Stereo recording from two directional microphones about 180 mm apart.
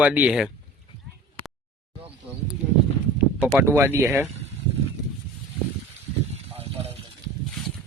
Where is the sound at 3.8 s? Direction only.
15° right (ahead or behind).